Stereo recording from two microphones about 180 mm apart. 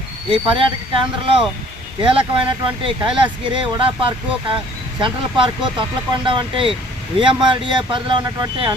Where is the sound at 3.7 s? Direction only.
30° right (ahead or behind).